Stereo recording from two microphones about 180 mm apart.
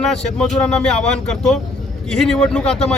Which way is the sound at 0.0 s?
Centre (ahead or behind).